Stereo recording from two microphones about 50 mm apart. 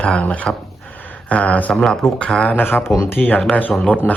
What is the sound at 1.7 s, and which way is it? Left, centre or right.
Speech, centre.